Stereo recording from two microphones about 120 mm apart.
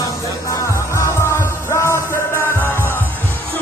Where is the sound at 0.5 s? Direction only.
25° left (ahead or behind).